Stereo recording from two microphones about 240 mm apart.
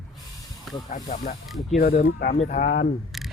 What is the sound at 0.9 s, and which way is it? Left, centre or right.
Speech, left.